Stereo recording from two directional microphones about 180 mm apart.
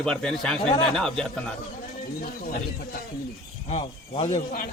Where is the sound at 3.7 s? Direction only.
35° left (ahead or behind).